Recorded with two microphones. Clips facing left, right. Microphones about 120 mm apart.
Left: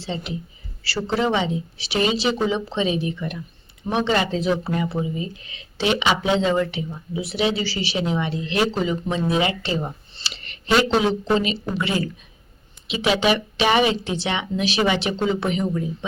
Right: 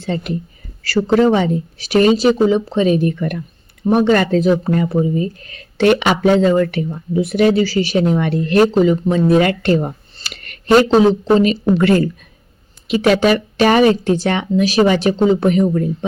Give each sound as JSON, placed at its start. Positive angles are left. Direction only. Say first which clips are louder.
{"t": 0.0, "sound": "speech", "louder": "right 7 dB", "side_deg": -50}
{"t": 11.7, "sound": "speech", "louder": "right 12 dB", "side_deg": -55}